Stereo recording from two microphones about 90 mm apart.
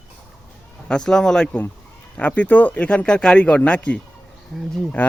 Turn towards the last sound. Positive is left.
turn(degrees=20)  # may be behind; listen again after turning